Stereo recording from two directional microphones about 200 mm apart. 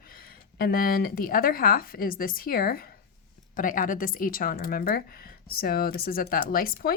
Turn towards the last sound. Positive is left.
turn(degrees=45)  # may be behind; listen again after turning